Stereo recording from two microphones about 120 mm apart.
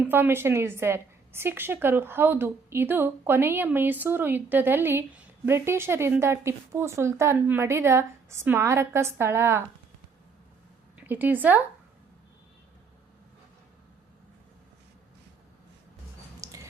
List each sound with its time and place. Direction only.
0.0 s a woman's voice: 20° right (ahead or behind)
10.9 s speech: 15° right (ahead or behind)
16.4 s a sound: 25° right (ahead or behind)